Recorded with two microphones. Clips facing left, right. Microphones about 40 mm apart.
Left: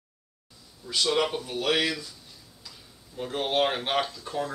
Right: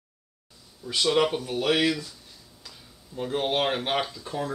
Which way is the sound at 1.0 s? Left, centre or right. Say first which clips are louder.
Right 3 dB; centre.